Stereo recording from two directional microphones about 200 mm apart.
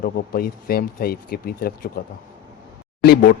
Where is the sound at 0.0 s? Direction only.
50° left (ahead or behind).